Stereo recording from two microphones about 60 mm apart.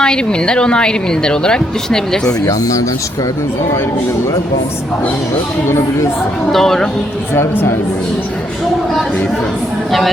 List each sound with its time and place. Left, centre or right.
0.0 s a woman's voice: centre
2.5 s speech: left
5.6 s speech: left
6.5 s speech: centre
7.3 s speech: left